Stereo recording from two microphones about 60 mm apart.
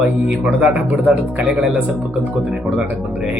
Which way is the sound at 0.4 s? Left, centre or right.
Right.